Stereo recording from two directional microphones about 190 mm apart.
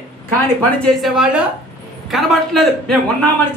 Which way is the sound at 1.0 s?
Centre (ahead or behind).